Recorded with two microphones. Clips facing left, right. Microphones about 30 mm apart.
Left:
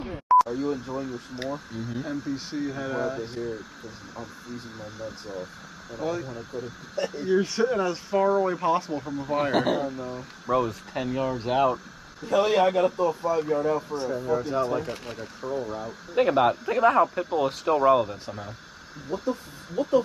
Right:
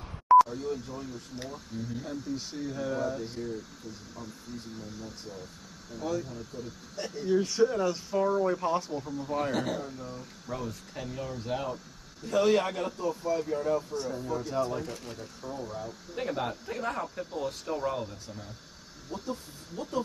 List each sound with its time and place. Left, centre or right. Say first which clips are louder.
0.5 s speech: left 6 dB; left
4.7 s speech: left 5 dB; left
10.4 s speech: left 13 dB; left
13.9 s speech: left 6 dB; left
19.0 s speech: left 8 dB; left